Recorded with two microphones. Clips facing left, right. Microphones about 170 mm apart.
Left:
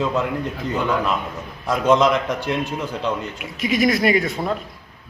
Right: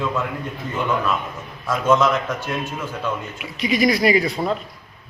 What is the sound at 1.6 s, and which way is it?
Speech, 15° left (ahead or behind).